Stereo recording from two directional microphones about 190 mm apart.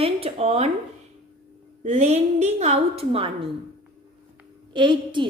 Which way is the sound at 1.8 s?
35° right (ahead or behind).